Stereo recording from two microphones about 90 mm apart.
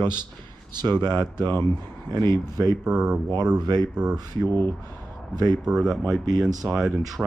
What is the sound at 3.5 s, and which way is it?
Speech, 50° right (ahead or behind).